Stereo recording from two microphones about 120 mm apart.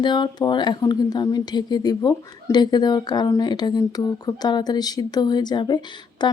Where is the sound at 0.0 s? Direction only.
40° left (ahead or behind).